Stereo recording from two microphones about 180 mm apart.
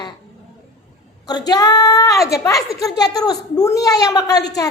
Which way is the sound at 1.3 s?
20° left (ahead or behind).